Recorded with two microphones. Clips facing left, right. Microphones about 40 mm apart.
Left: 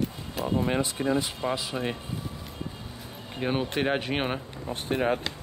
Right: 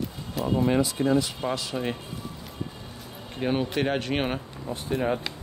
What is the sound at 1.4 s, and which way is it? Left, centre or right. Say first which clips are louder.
Speech: even; centre.